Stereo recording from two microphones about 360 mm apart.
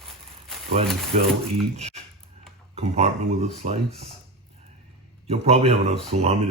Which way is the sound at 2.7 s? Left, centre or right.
Centre.